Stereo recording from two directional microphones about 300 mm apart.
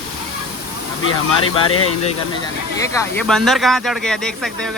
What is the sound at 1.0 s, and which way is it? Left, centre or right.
Speech, left.